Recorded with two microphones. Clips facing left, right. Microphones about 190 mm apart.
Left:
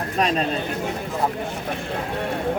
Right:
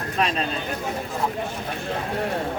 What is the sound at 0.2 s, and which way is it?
Speech, 40° left (ahead or behind).